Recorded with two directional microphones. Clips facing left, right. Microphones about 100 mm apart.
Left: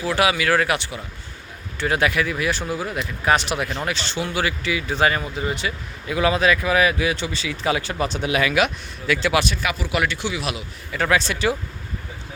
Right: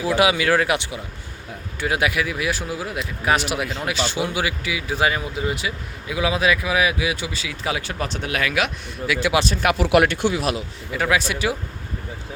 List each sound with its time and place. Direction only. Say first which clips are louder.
0.0 s speech: right 2 dB; 20° right (ahead or behind); by 9.1 s centre (ahead or behind)
9.6 s speech: right 6 dB; 65° right (ahead or behind); by 10.6 s 40° right (ahead or behind)
10.9 s speech: even; 10° right (ahead or behind)